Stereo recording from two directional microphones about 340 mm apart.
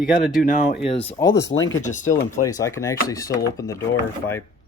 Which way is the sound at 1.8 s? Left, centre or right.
Left.